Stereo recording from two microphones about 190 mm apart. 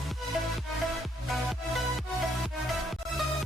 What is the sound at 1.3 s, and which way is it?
Music, centre (ahead or behind).